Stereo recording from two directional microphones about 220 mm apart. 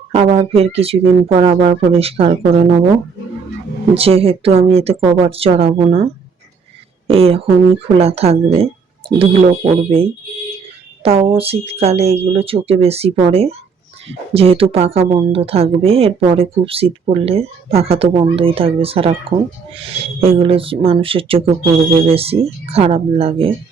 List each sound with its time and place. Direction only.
0.3 s a woman's voice: 25° right (ahead or behind)
3.9 s a woman's voice: 25° right (ahead or behind)
7.1 s a woman's voice: 25° right (ahead or behind)